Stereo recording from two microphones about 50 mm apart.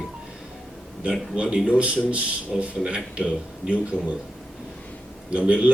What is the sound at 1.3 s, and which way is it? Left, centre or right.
A man's voice, centre.